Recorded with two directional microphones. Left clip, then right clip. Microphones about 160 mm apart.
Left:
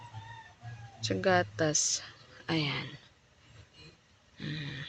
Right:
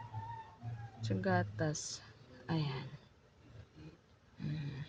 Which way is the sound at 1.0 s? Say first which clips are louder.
Left 9 dB; 15° left (ahead or behind).